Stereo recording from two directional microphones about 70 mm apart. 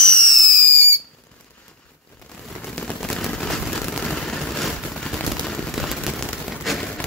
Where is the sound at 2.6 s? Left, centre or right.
Centre.